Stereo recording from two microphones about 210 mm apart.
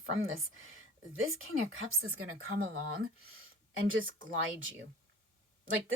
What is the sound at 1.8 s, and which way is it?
Speech, 85° right.